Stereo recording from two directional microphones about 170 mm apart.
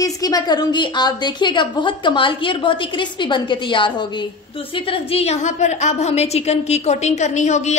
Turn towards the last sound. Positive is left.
turn(degrees=45)  # may be behind; listen again after turning